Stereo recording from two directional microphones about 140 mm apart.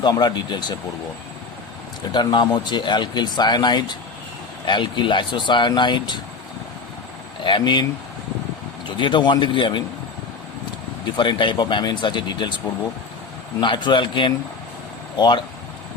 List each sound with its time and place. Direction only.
0.0 s speech: 30° left (ahead or behind)
2.1 s speech: 30° left (ahead or behind)
7.4 s speech: 35° left (ahead or behind)
9.0 s speech: 35° left (ahead or behind)
11.2 s speech: 35° left (ahead or behind)
13.6 s speech: 35° left (ahead or behind)